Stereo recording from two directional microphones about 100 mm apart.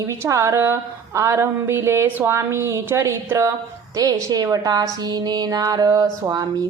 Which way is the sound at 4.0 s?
35° right (ahead or behind).